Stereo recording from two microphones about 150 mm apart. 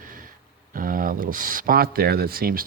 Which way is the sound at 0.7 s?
65° right (ahead or behind).